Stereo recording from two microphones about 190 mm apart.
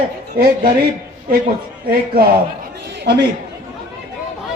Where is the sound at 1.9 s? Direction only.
55° right (ahead or behind).